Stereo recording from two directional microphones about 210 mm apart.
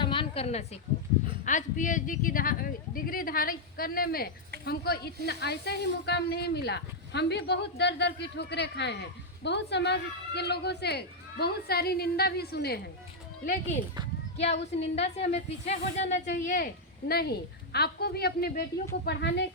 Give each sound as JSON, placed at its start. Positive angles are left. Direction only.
{"t": 0.0, "sound": "a sound", "side_deg": 25}
{"t": 1.5, "sound": "a woman's voice", "side_deg": 35}
{"t": 14.3, "sound": "a woman's voice", "side_deg": 30}
{"t": 17.1, "sound": "a woman's voice", "side_deg": 50}